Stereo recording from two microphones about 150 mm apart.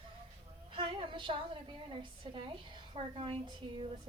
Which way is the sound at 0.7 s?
35° right (ahead or behind).